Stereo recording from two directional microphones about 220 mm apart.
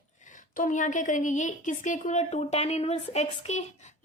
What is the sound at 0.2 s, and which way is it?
A woman's voice, 35° left (ahead or behind).